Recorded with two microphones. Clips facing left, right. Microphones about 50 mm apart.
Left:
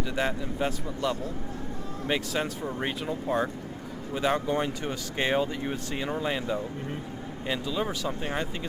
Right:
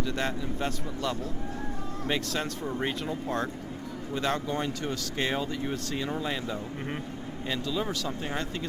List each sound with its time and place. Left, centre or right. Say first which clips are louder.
0.0 s speech: left 2 dB; centre